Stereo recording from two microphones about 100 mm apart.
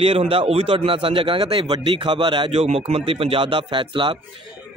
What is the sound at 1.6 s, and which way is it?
A man's voice, 45° right (ahead or behind).